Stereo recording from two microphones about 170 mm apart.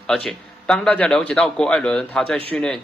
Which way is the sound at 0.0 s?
5° left (ahead or behind).